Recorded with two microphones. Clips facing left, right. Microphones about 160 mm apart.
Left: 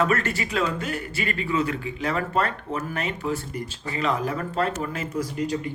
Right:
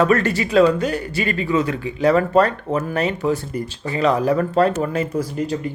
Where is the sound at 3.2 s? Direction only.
80° right.